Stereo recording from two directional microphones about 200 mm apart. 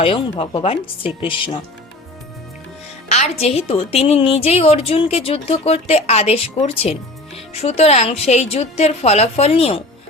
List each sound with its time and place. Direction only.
0.0 s speech: 25° left (ahead or behind)
3.1 s a woman's voice: 35° left (ahead or behind)